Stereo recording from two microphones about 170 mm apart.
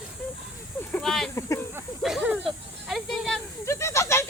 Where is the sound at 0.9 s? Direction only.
5° left (ahead or behind).